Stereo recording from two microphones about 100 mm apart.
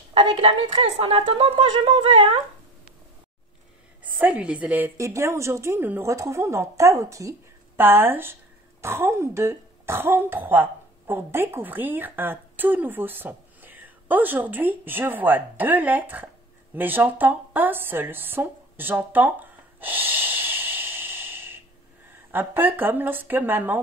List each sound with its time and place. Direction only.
0.1 s speech: 55° right (ahead or behind)
4.0 s a woman's voice: 15° right (ahead or behind)
4.9 s speech: 30° right (ahead or behind)
7.7 s speech: 20° right (ahead or behind)
16.7 s a sound: 20° right (ahead or behind)
22.3 s speech: 20° right (ahead or behind)